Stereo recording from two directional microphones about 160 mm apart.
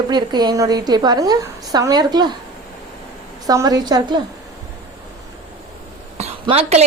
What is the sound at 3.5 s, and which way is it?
Speech, 25° right (ahead or behind).